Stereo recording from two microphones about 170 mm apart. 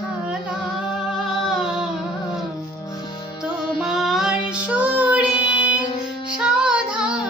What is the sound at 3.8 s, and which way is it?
Child singing, centre (ahead or behind).